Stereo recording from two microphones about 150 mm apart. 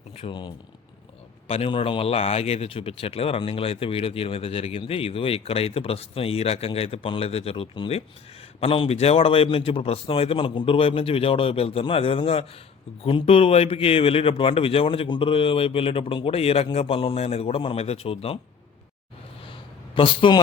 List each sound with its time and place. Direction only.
0.2 s speech: 35° left (ahead or behind)
20.0 s speech: 35° left (ahead or behind)